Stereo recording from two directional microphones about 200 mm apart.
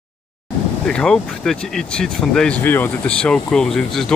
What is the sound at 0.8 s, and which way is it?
Speech, 5° left (ahead or behind).